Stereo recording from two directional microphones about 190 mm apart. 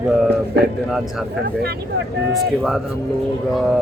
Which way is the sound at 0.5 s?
55° right (ahead or behind).